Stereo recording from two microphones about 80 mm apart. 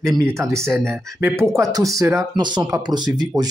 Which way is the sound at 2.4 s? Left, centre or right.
Right.